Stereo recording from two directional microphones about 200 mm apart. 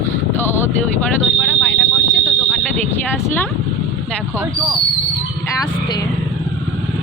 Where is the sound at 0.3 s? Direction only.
10° left (ahead or behind).